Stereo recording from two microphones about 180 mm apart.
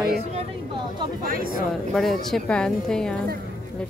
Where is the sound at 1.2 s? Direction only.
50° right (ahead or behind).